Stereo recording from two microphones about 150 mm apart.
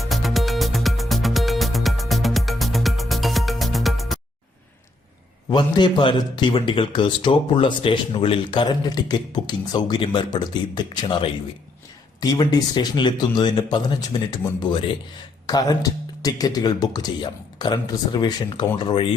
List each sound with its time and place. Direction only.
0.0 s music: centre (ahead or behind)
5.5 s speech: 30° left (ahead or behind)